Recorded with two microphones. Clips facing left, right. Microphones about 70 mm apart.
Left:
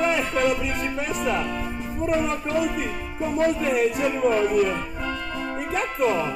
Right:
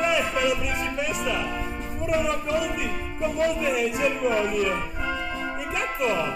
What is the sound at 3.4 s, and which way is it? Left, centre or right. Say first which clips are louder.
Speech: left 3 dB; left.